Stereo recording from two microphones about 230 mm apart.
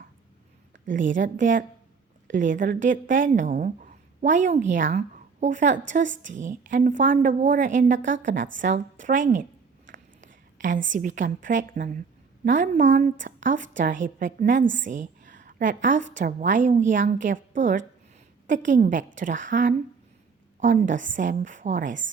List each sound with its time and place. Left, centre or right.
0.9 s a woman's voice: right
10.2 s a sound: right
10.9 s a woman's voice: right